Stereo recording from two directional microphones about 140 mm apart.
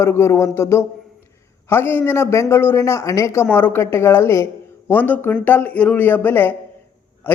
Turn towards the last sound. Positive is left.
turn(degrees=15)  # may be behind; listen again after turning